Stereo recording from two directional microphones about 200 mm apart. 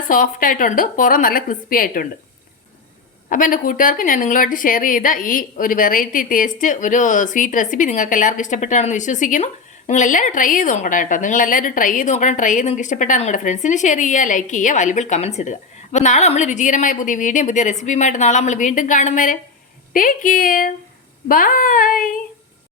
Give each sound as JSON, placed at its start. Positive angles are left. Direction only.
{"t": 0.1, "sound": "a woman's voice", "side_deg": 45}
{"t": 3.2, "sound": "a woman's voice", "side_deg": 45}